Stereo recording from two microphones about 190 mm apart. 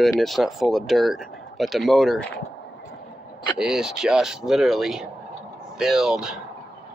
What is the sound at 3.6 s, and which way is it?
Speech, 5° right (ahead or behind).